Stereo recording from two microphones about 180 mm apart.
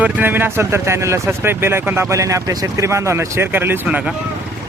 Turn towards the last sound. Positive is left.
turn(degrees=-5)  # may be behind; listen again after turning